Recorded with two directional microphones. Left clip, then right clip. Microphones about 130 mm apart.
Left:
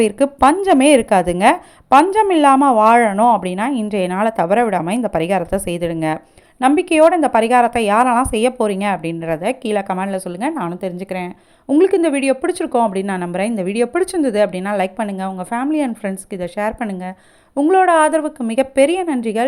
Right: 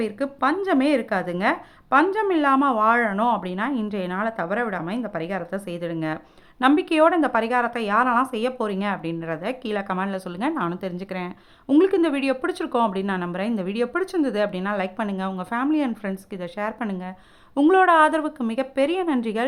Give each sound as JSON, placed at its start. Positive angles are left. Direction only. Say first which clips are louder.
{"t": 0.0, "sound": "a woman's voice", "louder": "left 11 dB", "side_deg": 45}
{"t": 6.6, "sound": "a woman's voice", "louder": "left 6 dB", "side_deg": 20}
{"t": 17.7, "sound": "a woman's voice", "louder": "left 4 dB", "side_deg": 15}
{"t": 18.4, "sound": "a woman's voice", "louder": "left 11 dB", "side_deg": 35}